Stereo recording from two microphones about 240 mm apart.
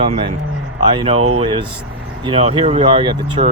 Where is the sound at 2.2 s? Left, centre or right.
Right.